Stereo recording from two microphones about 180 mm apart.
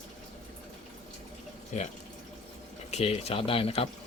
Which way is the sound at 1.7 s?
40° left (ahead or behind).